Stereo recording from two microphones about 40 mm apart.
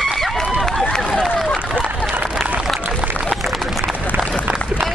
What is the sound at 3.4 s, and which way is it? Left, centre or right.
Run, centre.